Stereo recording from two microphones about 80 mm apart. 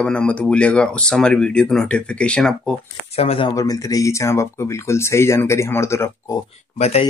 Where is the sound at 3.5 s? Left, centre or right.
Left.